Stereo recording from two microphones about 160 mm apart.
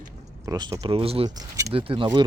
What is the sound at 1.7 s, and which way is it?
Speech, 35° right (ahead or behind).